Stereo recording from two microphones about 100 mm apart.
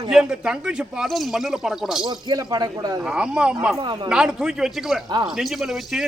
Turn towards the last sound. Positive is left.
turn(degrees=-5)  # may be behind; listen again after turning